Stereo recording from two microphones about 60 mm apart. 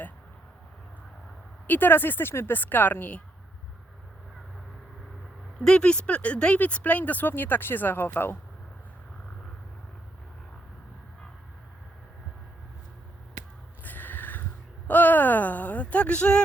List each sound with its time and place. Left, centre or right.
1.6 s speech: left
5.5 s speech: centre; by 8.4 s left
13.8 s a sound: left
14.8 s speech: left